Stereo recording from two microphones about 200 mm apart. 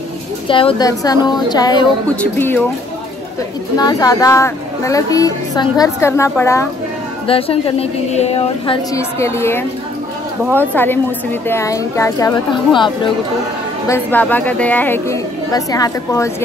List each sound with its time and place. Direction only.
0.5 s a woman's voice: 25° left (ahead or behind)
2.0 s a woman's voice: 10° left (ahead or behind)
3.7 s a woman's voice: 20° left (ahead or behind)
7.2 s a woman's voice: 30° left (ahead or behind)
8.9 s a woman's voice: 15° left (ahead or behind)
13.8 s a woman's voice: 10° left (ahead or behind)